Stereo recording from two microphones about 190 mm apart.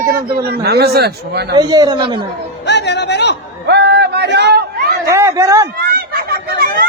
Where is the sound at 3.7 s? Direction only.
60° right (ahead or behind).